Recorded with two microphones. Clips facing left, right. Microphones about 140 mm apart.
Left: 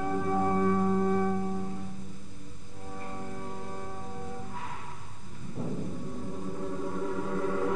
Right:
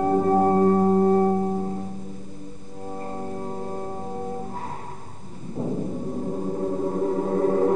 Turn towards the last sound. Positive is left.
turn(degrees=-40)  # may be behind; listen again after turning